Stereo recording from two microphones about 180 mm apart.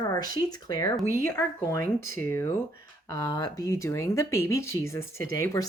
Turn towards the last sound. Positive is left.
turn(degrees=15)  # may be behind; listen again after turning